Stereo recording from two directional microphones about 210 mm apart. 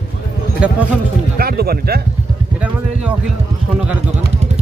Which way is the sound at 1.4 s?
45° right (ahead or behind).